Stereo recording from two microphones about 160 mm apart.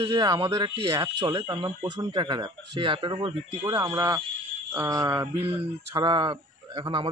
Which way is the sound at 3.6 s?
20° right (ahead or behind).